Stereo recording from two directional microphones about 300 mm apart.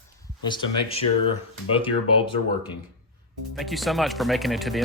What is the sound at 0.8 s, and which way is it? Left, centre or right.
Speech, centre.